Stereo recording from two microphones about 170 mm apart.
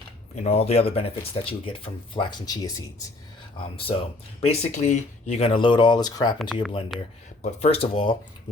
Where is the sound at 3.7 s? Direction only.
35° left (ahead or behind).